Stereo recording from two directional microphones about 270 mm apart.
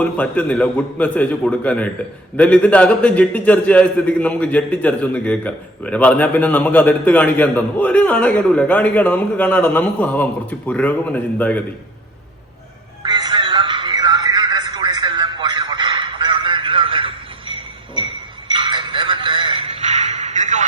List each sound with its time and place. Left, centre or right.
0.0 s a man's voice: centre
13.1 s music: centre